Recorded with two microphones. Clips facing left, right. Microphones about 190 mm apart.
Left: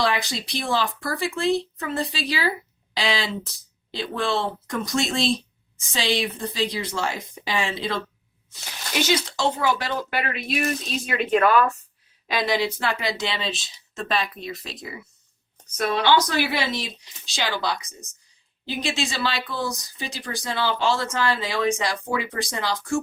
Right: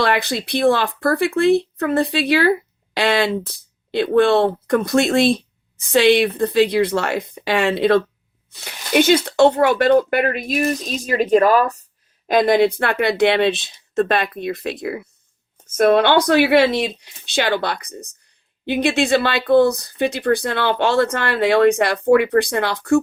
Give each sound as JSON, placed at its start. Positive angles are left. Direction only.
{"t": 0.0, "sound": "speech", "side_deg": -60}
{"t": 12.3, "sound": "speech", "side_deg": -50}